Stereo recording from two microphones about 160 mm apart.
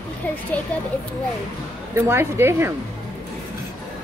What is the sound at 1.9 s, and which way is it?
Speech, 15° right (ahead or behind).